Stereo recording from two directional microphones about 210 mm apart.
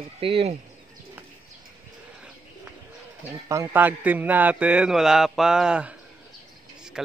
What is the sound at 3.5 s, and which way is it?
A man's voice, 10° right (ahead or behind).